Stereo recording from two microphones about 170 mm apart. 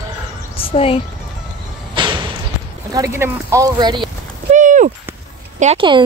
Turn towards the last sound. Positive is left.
turn(degrees=-40)  # may be behind; listen again after turning